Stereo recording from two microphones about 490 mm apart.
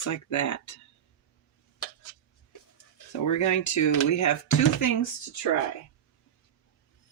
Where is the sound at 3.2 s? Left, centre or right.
Left.